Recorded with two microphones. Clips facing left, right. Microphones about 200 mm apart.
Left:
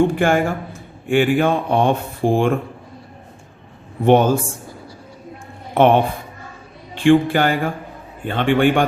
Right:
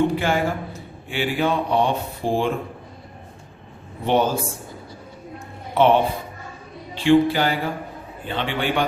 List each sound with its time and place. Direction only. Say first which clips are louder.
0.0 s speech: left 4 dB; 50° left (ahead or behind)
4.0 s speech: left 6 dB; 50° left (ahead or behind)
5.7 s a man's voice: left 3 dB; 55° left (ahead or behind)